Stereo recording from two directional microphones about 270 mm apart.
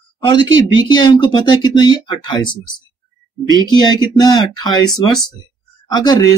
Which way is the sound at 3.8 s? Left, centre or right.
Centre.